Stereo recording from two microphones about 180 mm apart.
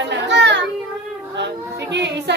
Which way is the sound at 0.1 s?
80° right.